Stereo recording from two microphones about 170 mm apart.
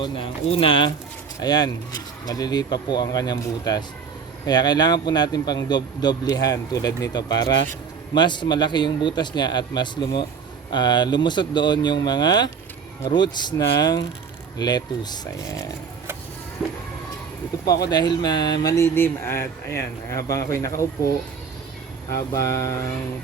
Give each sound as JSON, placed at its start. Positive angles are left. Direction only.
{"t": 0.0, "sound": "speech", "side_deg": 30}
{"t": 16.6, "sound": "music", "side_deg": -5}
{"t": 17.9, "sound": "speech", "side_deg": 25}
{"t": 22.4, "sound": "music", "side_deg": 15}